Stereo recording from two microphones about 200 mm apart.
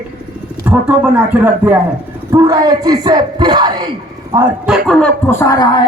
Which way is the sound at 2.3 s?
20° right (ahead or behind).